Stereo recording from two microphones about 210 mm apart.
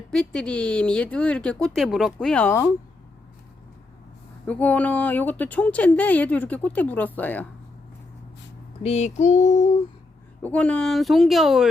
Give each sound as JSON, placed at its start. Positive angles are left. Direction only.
{"t": 0.1, "sound": "speech", "side_deg": 5}
{"t": 4.4, "sound": "speech", "side_deg": 5}
{"t": 8.8, "sound": "female singing", "side_deg": 30}
{"t": 10.4, "sound": "speech", "side_deg": 5}